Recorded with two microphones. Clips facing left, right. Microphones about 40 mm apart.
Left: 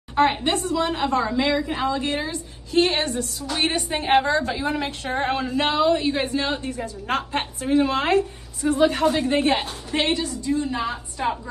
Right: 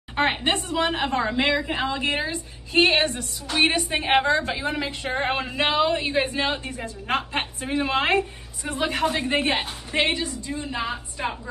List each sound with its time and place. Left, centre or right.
0.1 s a sound: right
0.4 s a woman's voice: right
3.2 s a woman's voice: right
4.1 s a woman's voice: right
4.8 s a woman's voice: right; by 11.3 s centre